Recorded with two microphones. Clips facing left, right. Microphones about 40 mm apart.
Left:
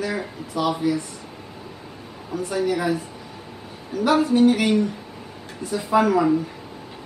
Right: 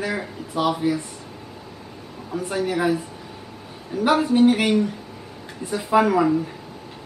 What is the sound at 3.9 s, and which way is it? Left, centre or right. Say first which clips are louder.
Speech: even; centre.